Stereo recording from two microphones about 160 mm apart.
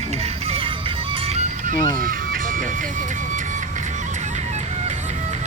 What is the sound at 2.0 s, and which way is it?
Music, 55° right (ahead or behind).